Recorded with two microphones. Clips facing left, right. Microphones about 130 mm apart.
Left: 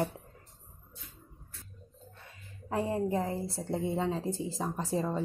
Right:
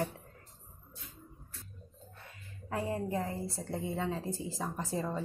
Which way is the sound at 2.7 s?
25° left (ahead or behind).